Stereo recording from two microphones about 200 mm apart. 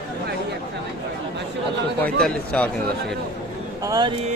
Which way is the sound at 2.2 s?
5° left (ahead or behind).